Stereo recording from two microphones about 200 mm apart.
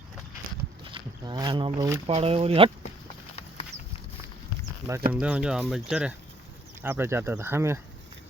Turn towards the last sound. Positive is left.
turn(degrees=-15)  # may be behind; listen again after turning